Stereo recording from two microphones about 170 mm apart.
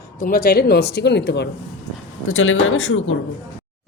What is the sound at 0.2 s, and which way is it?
Speech, 60° left (ahead or behind).